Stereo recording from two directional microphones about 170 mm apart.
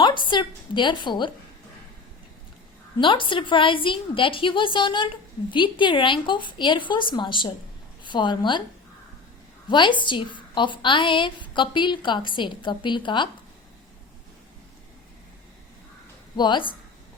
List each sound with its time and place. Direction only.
0.0 s a woman's voice: 25° left (ahead or behind)
3.0 s a woman's voice: 30° left (ahead or behind)
9.6 s a woman's voice: 25° left (ahead or behind)
16.4 s a woman's voice: 30° left (ahead or behind)